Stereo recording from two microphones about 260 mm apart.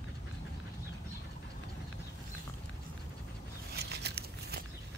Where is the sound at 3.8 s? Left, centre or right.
Right.